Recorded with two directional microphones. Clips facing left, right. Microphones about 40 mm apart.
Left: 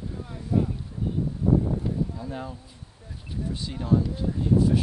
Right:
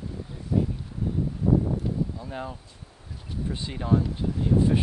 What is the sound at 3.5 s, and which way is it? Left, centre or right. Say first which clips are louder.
Speech: even; right.